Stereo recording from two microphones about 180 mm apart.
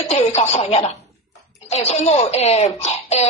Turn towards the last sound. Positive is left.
turn(degrees=35)  # may be behind; listen again after turning